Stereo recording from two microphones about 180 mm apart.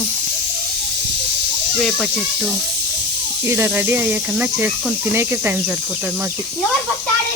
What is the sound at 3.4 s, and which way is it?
Speech, 15° right (ahead or behind).